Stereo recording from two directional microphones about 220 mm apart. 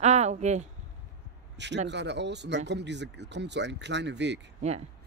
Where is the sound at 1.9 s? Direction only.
50° right (ahead or behind).